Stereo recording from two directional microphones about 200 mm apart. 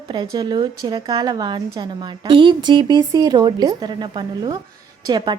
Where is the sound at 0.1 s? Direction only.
20° right (ahead or behind).